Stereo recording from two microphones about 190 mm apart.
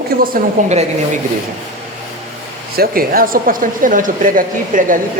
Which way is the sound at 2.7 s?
50° right (ahead or behind).